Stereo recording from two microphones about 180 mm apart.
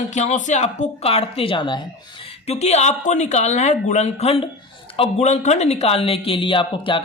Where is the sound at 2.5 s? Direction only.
35° left (ahead or behind).